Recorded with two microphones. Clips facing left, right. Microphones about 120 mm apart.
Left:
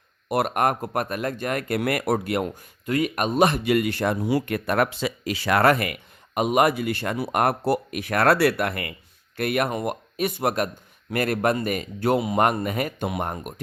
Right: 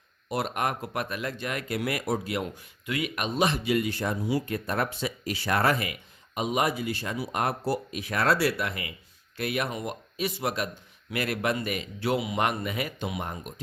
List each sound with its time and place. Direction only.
0.3 s speech: 60° left (ahead or behind)